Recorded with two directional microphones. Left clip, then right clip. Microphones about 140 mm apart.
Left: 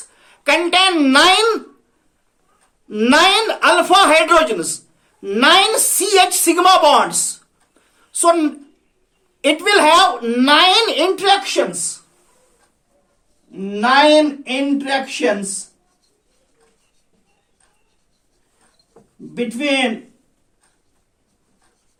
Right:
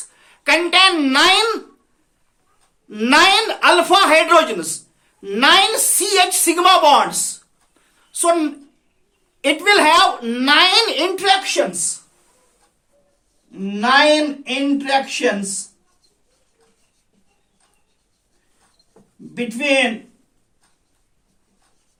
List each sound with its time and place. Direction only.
0.1 s a woman's voice: 25° left (ahead or behind)
2.9 s a woman's voice: 20° left (ahead or behind)
13.5 s speech: 15° left (ahead or behind)
19.3 s speech: 15° left (ahead or behind)